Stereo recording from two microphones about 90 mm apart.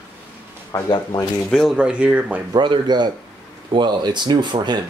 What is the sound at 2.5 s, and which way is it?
Speech, 55° right (ahead or behind).